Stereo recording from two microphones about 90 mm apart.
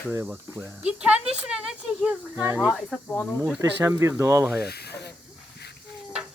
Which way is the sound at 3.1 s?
20° left (ahead or behind).